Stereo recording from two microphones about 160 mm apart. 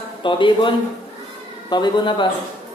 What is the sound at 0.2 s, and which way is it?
Speech, 30° left (ahead or behind).